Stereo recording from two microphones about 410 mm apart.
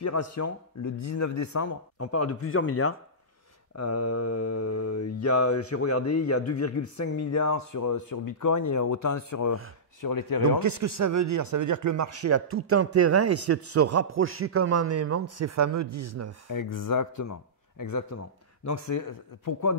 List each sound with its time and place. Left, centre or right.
0.0 s mantra: left
10.0 s speech: left
10.8 s a man's voice: right
16.4 s speech: left